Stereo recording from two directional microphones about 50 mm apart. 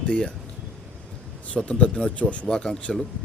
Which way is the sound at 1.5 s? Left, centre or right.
Left.